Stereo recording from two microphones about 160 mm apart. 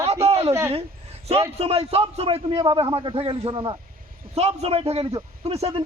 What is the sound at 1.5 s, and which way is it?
A man's voice, 40° right (ahead or behind).